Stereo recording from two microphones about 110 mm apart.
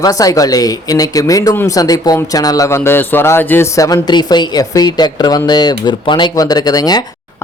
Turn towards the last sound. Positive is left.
turn(degrees=35)  # may be behind; listen again after turning